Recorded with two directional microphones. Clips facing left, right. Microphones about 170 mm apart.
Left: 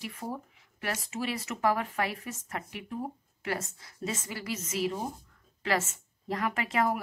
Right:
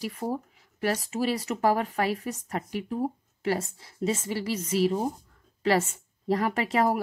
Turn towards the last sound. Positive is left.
turn(degrees=-35)  # may be behind; listen again after turning